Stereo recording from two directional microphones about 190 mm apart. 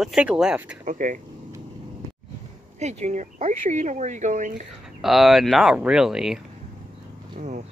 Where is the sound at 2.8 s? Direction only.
35° right (ahead or behind).